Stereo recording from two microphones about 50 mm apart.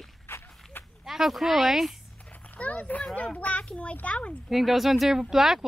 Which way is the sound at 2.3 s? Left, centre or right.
Left.